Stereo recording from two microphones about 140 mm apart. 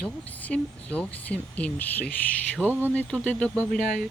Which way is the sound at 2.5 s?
15° right (ahead or behind).